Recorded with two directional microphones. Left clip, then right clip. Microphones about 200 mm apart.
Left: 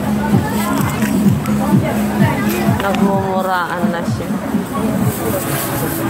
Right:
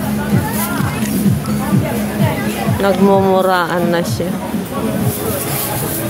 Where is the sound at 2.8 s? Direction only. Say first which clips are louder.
Right 8 dB; 50° right (ahead or behind).